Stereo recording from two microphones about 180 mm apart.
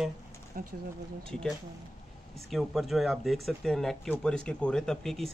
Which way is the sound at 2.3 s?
Centre (ahead or behind).